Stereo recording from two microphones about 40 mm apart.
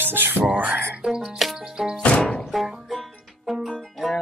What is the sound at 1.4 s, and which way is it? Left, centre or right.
Music, centre.